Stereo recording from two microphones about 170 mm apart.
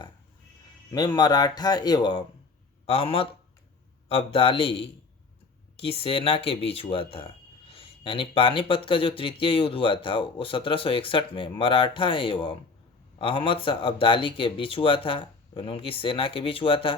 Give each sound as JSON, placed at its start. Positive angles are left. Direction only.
{"t": 0.9, "sound": "speech", "side_deg": 25}